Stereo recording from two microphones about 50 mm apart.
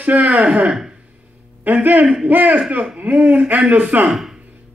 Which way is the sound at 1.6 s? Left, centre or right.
Right.